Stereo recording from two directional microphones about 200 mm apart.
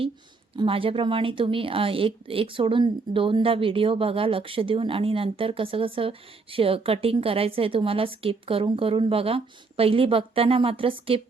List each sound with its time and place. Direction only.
0.5 s speech: 25° right (ahead or behind)